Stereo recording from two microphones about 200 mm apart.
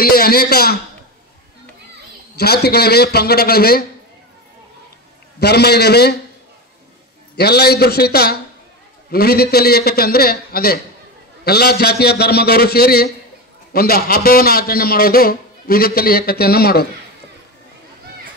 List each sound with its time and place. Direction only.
0.0 s a man's voice: 50° left (ahead or behind)
2.3 s a man's voice: 55° left (ahead or behind)
5.4 s a man's voice: 55° left (ahead or behind)
7.3 s a man's voice: 55° left (ahead or behind)